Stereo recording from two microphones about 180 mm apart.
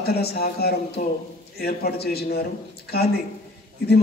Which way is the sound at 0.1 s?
60° left (ahead or behind).